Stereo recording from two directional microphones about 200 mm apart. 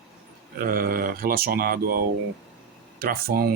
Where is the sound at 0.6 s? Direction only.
45° right (ahead or behind).